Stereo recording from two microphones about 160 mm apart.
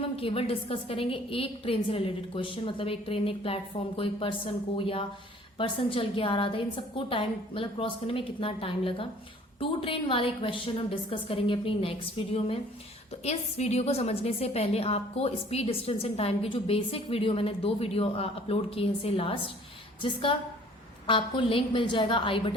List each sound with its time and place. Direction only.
0.2 s a woman's voice: 35° left (ahead or behind)